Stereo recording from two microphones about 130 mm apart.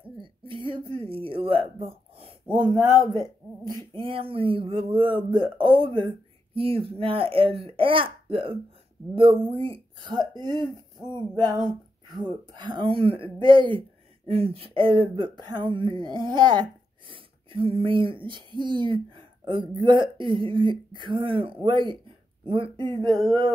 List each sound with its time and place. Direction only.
0.2 s speech: 40° right (ahead or behind)
3.1 s speech: 30° right (ahead or behind)
3.9 s speech: 45° right (ahead or behind)
11.1 s a sound: 30° right (ahead or behind)
12.5 s speech: 35° right (ahead or behind)